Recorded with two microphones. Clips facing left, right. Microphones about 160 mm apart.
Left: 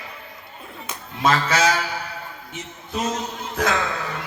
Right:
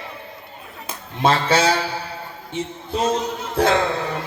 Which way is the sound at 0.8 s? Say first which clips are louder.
Right 2 dB; 30° right (ahead or behind).